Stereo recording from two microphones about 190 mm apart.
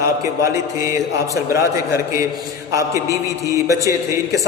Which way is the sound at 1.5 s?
15° right (ahead or behind).